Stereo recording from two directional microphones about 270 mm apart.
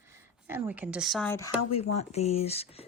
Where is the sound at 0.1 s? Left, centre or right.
Centre.